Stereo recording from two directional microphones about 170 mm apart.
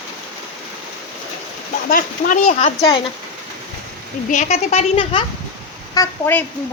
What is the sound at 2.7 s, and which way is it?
Speech, 20° left (ahead or behind).